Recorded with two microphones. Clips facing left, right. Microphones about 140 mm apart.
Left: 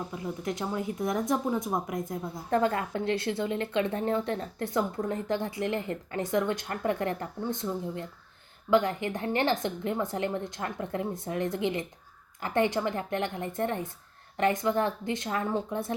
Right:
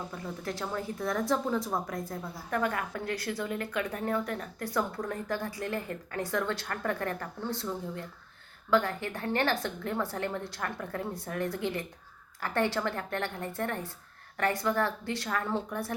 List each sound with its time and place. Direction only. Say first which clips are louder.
0.4 s a woman's voice: left 3 dB; 20° left (ahead or behind)